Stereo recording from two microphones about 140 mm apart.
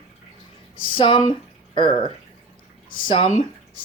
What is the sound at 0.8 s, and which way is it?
Speech, 40° left (ahead or behind).